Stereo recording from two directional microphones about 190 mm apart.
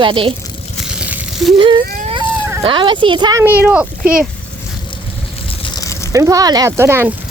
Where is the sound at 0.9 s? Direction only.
5° right (ahead or behind).